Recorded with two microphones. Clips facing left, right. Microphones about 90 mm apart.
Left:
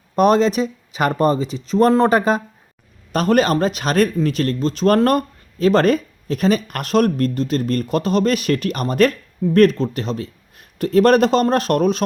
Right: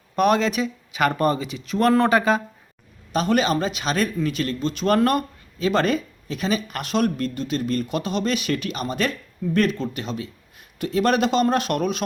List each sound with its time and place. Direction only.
0.2 s speech: 35° left (ahead or behind)